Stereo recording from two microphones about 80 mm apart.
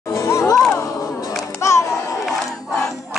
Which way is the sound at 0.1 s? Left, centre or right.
Left.